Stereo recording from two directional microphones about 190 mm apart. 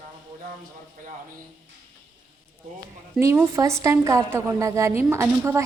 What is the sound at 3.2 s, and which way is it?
A woman's voice, 15° right (ahead or behind).